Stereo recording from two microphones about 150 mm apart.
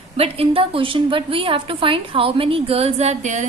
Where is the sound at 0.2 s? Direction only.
40° right (ahead or behind).